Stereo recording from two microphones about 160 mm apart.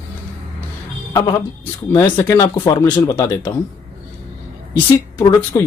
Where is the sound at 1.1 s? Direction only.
25° left (ahead or behind).